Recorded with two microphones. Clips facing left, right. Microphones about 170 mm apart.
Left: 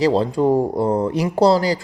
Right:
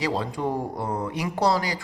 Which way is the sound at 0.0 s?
30° left (ahead or behind).